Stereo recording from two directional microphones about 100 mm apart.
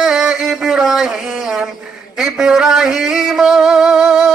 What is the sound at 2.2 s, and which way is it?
Music, 5° right (ahead or behind).